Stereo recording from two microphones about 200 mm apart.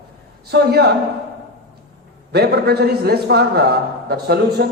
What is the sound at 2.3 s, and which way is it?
A man's voice, 55° right (ahead or behind).